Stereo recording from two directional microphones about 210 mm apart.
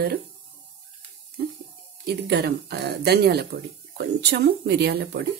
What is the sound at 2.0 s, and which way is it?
A woman's voice, 50° right (ahead or behind).